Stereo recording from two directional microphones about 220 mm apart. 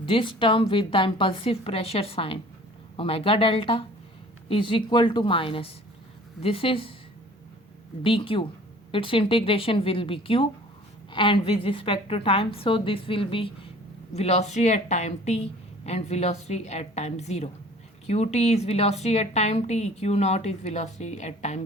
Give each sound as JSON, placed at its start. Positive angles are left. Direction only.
{"t": 0.0, "sound": "a woman's voice", "side_deg": 25}
{"t": 8.0, "sound": "a woman's voice", "side_deg": 25}